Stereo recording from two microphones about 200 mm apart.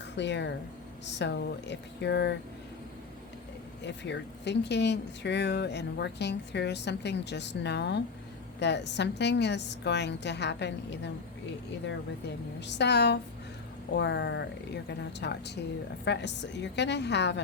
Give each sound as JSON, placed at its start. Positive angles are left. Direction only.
{"t": 0.2, "sound": "speech", "side_deg": 60}
{"t": 3.8, "sound": "speech", "side_deg": 60}
{"t": 12.5, "sound": "speech", "side_deg": 60}